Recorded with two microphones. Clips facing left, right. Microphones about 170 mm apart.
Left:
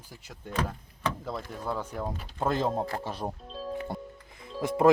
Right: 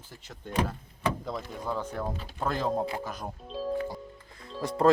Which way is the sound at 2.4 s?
20° left (ahead or behind).